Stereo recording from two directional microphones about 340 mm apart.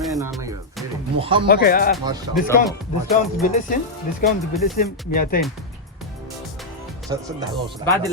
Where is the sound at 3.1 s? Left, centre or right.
Left.